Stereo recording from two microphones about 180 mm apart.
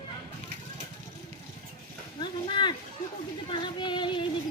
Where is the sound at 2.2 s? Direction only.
25° left (ahead or behind).